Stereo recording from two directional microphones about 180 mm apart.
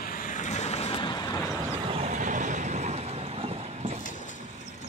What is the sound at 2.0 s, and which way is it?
Vehicle, 45° right (ahead or behind).